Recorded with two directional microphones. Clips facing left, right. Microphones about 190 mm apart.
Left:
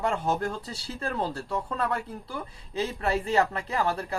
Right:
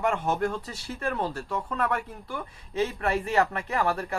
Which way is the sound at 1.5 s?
30° left (ahead or behind).